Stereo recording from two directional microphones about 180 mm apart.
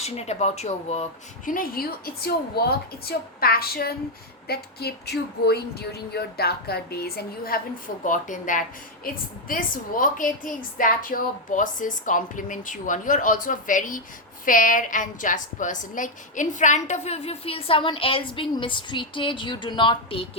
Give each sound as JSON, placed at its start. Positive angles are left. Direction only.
{"t": 0.0, "sound": "speech", "side_deg": 35}
{"t": 1.5, "sound": "speech", "side_deg": 55}
{"t": 8.0, "sound": "a woman's voice", "side_deg": 45}